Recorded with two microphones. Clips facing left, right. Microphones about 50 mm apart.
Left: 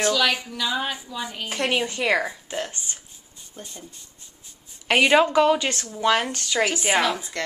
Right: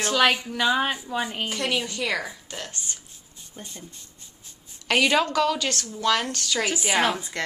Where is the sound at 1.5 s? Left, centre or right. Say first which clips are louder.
Left 3 dB; left.